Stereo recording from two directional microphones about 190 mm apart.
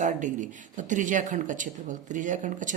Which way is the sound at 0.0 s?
40° right (ahead or behind).